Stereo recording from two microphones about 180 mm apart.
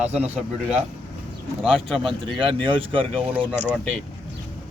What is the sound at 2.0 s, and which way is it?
A man's voice, 30° right (ahead or behind).